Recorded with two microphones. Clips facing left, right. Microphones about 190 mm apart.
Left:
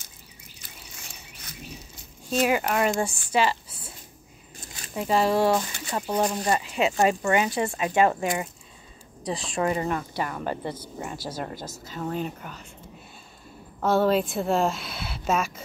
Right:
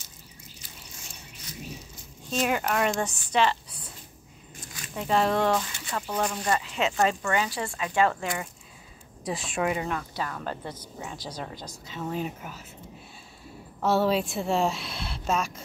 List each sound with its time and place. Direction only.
0.6 s a sound: 55° left (ahead or behind)
2.4 s a woman's voice: 5° left (ahead or behind)
4.6 s a sound: 30° left (ahead or behind)
4.9 s speech: 5° left (ahead or behind)
5.9 s speech: 20° left (ahead or behind)
9.2 s speech: centre (ahead or behind)
9.9 s speech: 10° left (ahead or behind); by 12.6 s 5° right (ahead or behind)
13.7 s a woman's voice: centre (ahead or behind)